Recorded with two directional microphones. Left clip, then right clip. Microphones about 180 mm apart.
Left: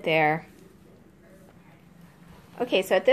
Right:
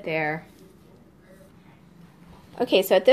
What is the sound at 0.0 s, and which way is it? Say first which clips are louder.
Speech: left 4 dB; 50° left (ahead or behind).